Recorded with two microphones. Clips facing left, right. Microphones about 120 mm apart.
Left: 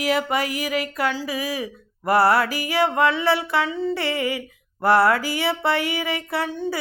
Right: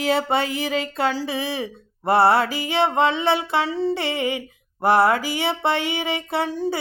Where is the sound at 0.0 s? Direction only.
30° right (ahead or behind).